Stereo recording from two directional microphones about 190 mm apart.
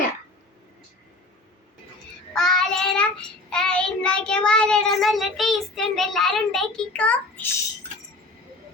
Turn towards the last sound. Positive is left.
turn(degrees=5)  # may be behind; listen again after turning